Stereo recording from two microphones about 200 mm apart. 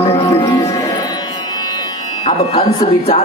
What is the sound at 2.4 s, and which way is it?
Speech, 30° left (ahead or behind).